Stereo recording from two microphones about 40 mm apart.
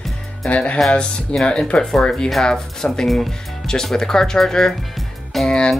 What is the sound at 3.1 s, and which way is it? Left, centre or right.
Speech, centre.